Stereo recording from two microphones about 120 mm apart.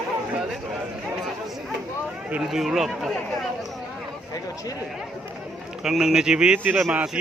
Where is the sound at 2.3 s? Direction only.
5° right (ahead or behind).